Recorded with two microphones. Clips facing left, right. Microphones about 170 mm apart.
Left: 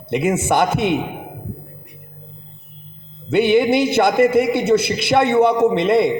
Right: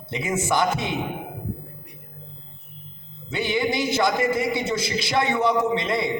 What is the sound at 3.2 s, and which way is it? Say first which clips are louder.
A man's voice: left 10 dB; 65° left (ahead or behind).